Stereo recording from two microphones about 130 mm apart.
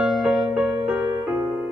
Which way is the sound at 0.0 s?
5° right (ahead or behind).